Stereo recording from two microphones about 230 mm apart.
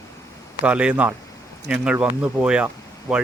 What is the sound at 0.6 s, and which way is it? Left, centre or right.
Speech, centre.